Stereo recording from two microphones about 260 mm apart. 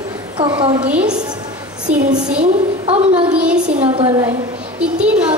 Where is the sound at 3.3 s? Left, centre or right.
Centre.